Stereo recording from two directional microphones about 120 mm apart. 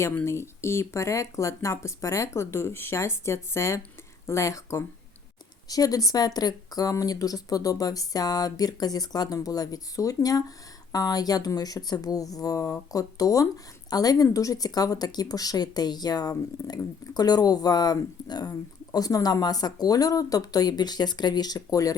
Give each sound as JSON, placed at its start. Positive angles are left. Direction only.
{"t": 0.0, "sound": "speech", "side_deg": 20}